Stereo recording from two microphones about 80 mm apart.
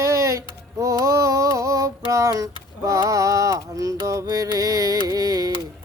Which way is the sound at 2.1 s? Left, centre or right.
Right.